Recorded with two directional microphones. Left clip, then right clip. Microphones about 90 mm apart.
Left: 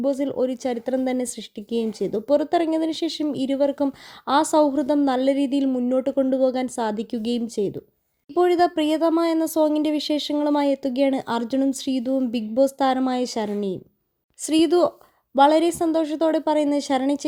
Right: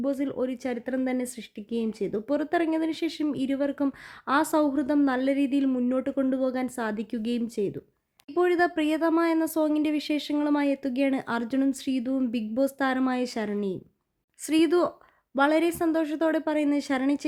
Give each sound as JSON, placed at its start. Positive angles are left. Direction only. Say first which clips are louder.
{"t": 0.0, "sound": "speech", "louder": "left 6 dB", "side_deg": 30}